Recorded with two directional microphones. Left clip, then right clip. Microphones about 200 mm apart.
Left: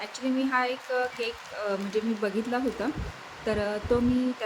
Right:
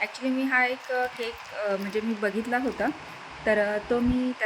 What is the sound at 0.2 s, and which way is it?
Speech, 5° right (ahead or behind).